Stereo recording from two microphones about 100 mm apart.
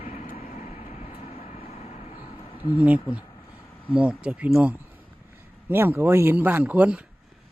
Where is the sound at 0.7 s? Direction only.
90° left.